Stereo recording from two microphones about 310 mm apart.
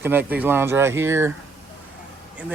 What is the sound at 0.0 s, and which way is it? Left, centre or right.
Speech, centre.